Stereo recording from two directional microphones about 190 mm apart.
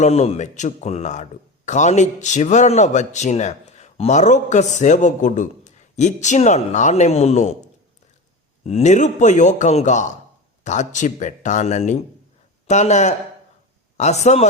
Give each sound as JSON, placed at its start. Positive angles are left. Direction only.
{"t": 0.0, "sound": "speech", "side_deg": 35}
{"t": 8.6, "sound": "speech", "side_deg": 35}